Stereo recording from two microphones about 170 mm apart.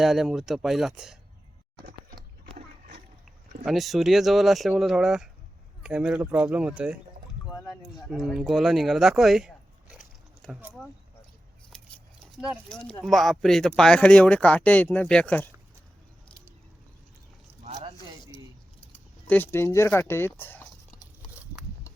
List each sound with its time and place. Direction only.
0.0 s speech: centre (ahead or behind)
1.8 s a sound: 55° right (ahead or behind)
3.7 s speech: centre (ahead or behind)
8.0 s speech: centre (ahead or behind)
11.7 s scissors: 5° left (ahead or behind)
12.4 s speech: 5° left (ahead or behind)
19.3 s speech: 15° left (ahead or behind)